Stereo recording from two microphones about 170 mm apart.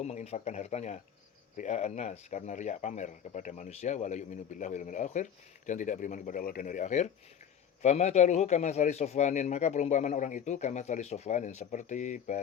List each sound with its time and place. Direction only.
0.0 s speech: 40° left (ahead or behind)